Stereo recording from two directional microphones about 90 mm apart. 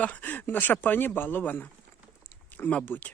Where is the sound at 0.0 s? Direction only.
20° left (ahead or behind).